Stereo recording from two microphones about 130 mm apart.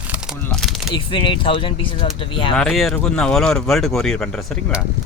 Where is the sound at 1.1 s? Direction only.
40° left (ahead or behind).